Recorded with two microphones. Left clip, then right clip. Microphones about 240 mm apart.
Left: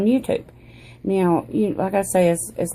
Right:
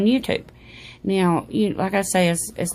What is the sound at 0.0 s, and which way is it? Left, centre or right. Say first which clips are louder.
Speech: left 1 dB; right.